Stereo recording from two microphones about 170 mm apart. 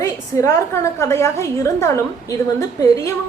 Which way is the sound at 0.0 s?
20° left (ahead or behind).